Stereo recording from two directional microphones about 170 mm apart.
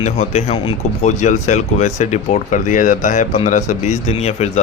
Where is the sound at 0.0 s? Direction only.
45° left (ahead or behind).